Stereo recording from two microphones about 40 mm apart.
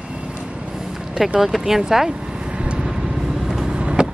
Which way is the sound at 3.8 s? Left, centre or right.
Right.